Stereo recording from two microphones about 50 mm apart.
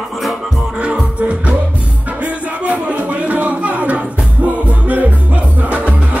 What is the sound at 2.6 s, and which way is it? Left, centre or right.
Music, right.